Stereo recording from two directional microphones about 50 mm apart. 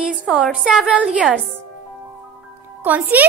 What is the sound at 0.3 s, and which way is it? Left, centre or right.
A woman's voice, centre.